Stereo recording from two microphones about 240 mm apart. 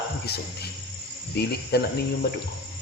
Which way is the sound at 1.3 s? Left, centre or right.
Left.